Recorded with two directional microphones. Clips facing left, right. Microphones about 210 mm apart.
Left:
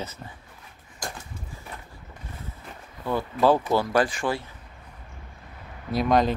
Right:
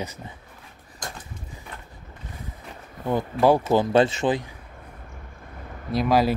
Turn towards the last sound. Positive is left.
turn(degrees=-5)  # may be behind; listen again after turning